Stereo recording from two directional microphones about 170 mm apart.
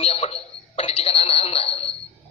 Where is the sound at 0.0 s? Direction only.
35° left (ahead or behind).